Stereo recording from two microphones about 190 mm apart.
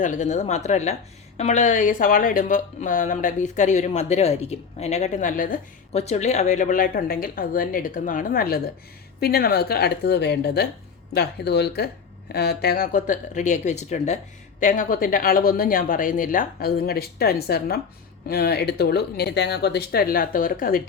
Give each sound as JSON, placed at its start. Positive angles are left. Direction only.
{"t": 0.0, "sound": "a woman's voice", "side_deg": 40}